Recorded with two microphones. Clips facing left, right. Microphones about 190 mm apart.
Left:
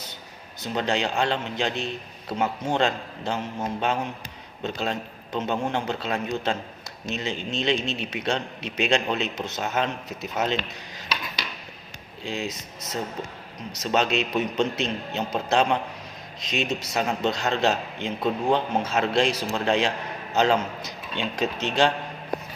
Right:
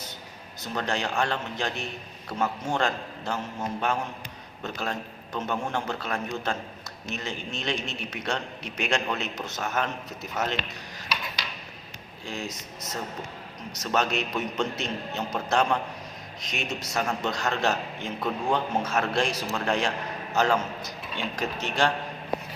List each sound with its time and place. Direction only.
0.7 s a man's voice: 20° left (ahead or behind)
12.2 s a man's voice: 20° left (ahead or behind)
13.8 s a man's voice: 20° left (ahead or behind)